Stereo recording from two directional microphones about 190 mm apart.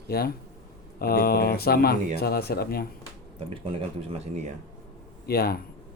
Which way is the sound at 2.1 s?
55° left (ahead or behind).